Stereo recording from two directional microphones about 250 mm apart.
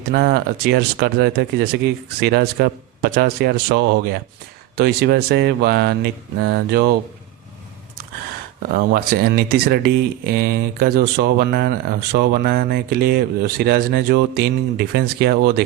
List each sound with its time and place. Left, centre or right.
0.1 s speech: right
8.7 s speech: right